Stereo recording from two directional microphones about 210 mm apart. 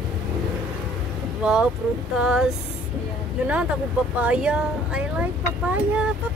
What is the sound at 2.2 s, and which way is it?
Speech, centre (ahead or behind).